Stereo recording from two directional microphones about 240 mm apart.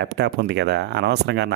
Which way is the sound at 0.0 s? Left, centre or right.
Right.